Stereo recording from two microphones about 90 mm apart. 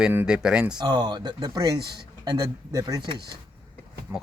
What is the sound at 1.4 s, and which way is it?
Speech, 45° right (ahead or behind).